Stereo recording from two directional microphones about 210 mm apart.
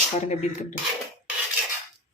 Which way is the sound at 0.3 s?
35° left (ahead or behind).